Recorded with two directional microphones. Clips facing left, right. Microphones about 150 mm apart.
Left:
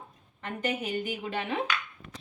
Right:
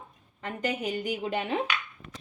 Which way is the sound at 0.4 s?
35° right (ahead or behind).